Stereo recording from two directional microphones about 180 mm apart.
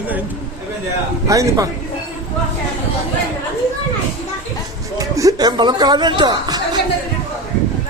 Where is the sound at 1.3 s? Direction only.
20° right (ahead or behind).